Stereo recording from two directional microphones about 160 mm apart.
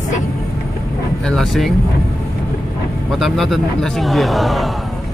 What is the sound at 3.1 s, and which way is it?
A man's voice, centre (ahead or behind).